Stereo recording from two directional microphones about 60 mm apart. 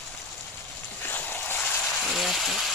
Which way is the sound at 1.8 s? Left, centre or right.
Centre.